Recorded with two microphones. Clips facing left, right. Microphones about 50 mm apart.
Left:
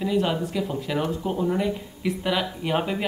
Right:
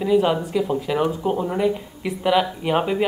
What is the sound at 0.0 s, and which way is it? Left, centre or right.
Speech, centre.